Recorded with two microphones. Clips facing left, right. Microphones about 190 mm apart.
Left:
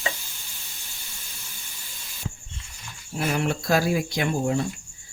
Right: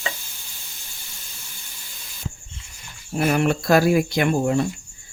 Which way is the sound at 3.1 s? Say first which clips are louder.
Right 6 dB; 55° right (ahead or behind).